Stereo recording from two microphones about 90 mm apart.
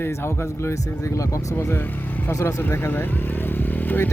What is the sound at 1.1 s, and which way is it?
Speech, 30° left (ahead or behind).